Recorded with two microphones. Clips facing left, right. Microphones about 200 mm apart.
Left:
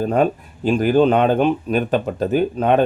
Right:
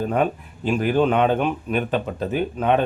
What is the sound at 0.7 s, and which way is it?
Speech, 35° left (ahead or behind).